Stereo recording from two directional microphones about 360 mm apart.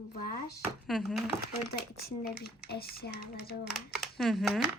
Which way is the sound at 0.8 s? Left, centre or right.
Centre.